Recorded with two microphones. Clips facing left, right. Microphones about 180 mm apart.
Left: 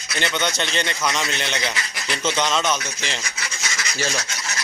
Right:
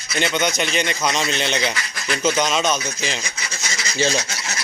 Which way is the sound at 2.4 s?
15° right (ahead or behind).